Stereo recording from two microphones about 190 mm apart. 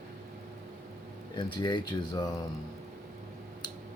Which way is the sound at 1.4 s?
25° left (ahead or behind).